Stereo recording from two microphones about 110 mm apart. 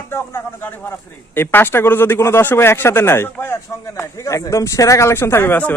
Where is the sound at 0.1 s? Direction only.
20° left (ahead or behind).